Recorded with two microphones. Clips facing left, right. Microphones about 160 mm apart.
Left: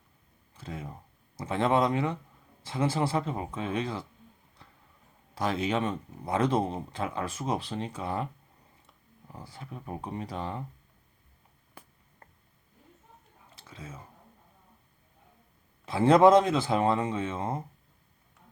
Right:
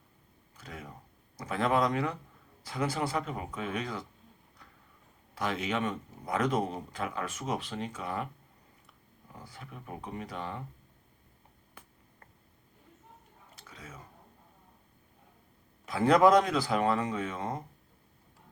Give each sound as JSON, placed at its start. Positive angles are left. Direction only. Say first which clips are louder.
{"t": 0.5, "sound": "a sound", "louder": "left 5 dB", "side_deg": 30}
{"t": 1.4, "sound": "speech", "louder": "left 3 dB", "side_deg": 25}
{"t": 5.4, "sound": "speech", "louder": "left 3 dB", "side_deg": 35}
{"t": 9.3, "sound": "speech", "louder": "left 4 dB", "side_deg": 30}
{"t": 13.6, "sound": "speech", "louder": "left 4 dB", "side_deg": 30}
{"t": 15.9, "sound": "speech", "louder": "left 3 dB", "side_deg": 25}